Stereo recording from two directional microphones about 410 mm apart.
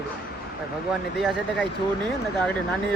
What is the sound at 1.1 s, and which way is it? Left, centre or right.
Speech, centre.